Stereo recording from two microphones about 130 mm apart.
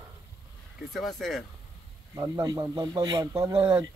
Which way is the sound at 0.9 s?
Centre (ahead or behind).